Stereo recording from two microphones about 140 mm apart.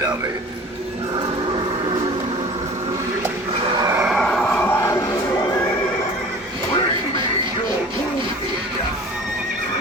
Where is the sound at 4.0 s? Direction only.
Centre (ahead or behind); by 4.9 s 15° left (ahead or behind).